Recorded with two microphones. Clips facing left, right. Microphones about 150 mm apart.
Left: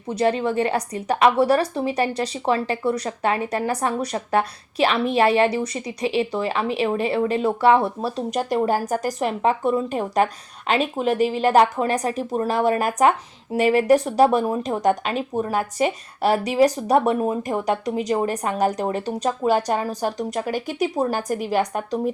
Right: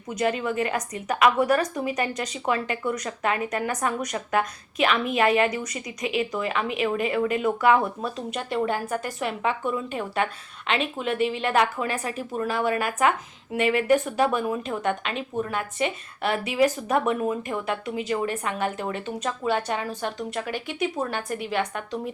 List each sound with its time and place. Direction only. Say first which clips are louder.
0.1 s a woman's voice: left 5 dB; 30° left (ahead or behind)